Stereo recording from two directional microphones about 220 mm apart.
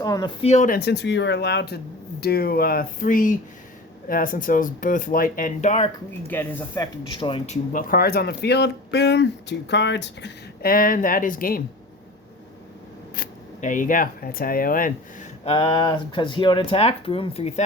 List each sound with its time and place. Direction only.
0.0 s speech: 15° left (ahead or behind)
0.4 s speech: 35° left (ahead or behind)
6.2 s speech: 10° left (ahead or behind)
7.1 s speech: 25° left (ahead or behind); by 11.6 s 40° left (ahead or behind)
13.1 s speech: 35° left (ahead or behind)
15.5 s speech: 20° left (ahead or behind)